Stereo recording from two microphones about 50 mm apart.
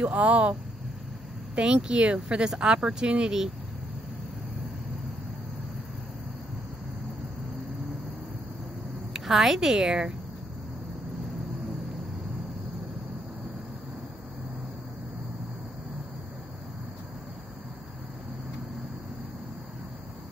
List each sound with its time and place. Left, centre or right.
0.0 s speech: right
9.1 s a woman's voice: centre